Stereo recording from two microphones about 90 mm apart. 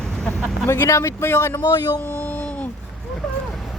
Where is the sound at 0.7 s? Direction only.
30° left (ahead or behind).